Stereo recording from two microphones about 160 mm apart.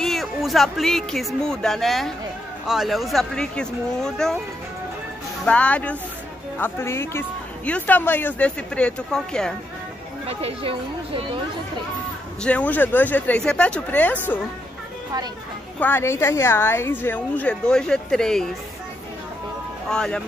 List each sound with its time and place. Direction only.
0.0 s speech: centre (ahead or behind)
5.4 s a man's voice: 10° left (ahead or behind)
10.2 s speech: 35° right (ahead or behind)
12.4 s a man's voice: 10° left (ahead or behind)
15.8 s a man's voice: 15° left (ahead or behind)
19.9 s speech: 5° left (ahead or behind)